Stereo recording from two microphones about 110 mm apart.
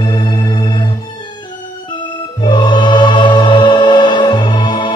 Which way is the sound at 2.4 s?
45° left (ahead or behind).